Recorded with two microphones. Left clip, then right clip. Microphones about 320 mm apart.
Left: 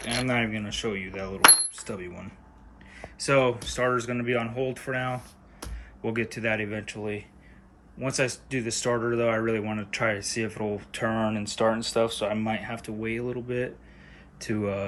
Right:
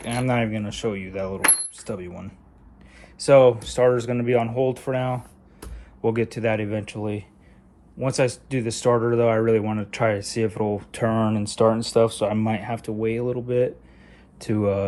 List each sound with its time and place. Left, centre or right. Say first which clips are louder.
0.0 s speech: right 3 dB; centre